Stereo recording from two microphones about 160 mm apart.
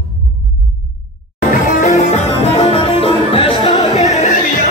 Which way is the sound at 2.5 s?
35° left (ahead or behind).